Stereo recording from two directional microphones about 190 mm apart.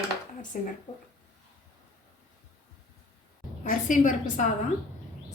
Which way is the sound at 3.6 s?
45° left (ahead or behind).